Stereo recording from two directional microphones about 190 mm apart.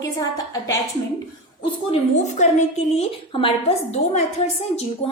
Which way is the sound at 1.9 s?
40° left (ahead or behind).